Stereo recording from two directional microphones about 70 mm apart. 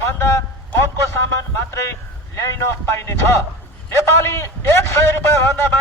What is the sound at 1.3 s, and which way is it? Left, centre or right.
A man's voice, left.